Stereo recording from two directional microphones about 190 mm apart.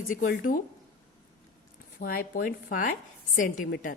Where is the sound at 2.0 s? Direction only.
50° left (ahead or behind).